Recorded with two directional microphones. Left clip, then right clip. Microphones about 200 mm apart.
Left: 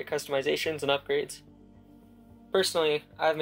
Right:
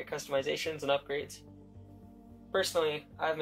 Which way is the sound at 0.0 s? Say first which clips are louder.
Left 4 dB; 40° left (ahead or behind).